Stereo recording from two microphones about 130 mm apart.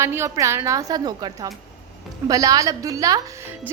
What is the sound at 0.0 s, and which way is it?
A woman's voice, 20° right (ahead or behind).